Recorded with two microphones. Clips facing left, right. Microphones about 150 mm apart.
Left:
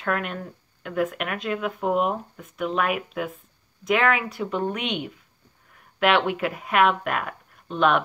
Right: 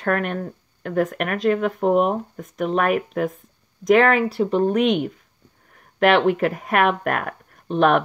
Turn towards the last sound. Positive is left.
turn(degrees=-40)  # may be behind; listen again after turning